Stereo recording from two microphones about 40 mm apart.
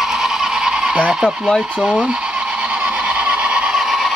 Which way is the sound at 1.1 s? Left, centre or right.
Centre.